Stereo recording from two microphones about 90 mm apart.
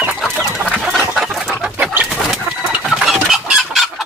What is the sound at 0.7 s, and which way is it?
Bird, centre (ahead or behind).